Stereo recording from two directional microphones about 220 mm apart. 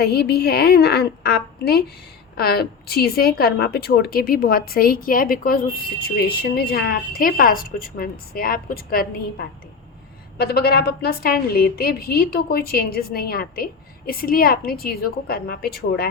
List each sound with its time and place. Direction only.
0.0 s a woman's voice: 45° left (ahead or behind)